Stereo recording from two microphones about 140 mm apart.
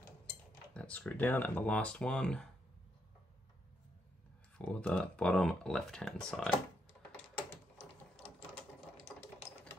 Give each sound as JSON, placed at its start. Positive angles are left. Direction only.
{"t": 0.7, "sound": "speech", "side_deg": 10}
{"t": 4.6, "sound": "speech", "side_deg": 5}
{"t": 7.0, "sound": "typing", "side_deg": 10}